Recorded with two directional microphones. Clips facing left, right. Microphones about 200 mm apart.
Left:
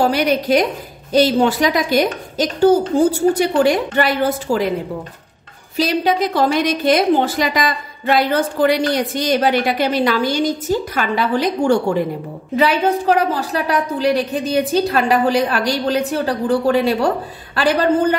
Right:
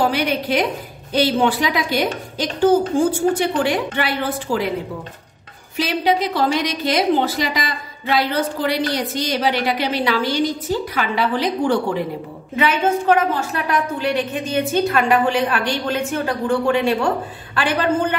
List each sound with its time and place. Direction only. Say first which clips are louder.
0.0 s a woman's voice: left 3 dB; 40° left (ahead or behind)
5.8 s a woman's voice: left 2 dB; 45° left (ahead or behind)